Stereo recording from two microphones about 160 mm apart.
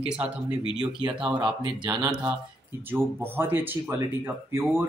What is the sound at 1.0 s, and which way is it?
Speech, 30° right (ahead or behind).